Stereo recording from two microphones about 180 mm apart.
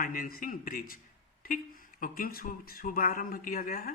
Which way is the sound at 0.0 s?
50° left (ahead or behind).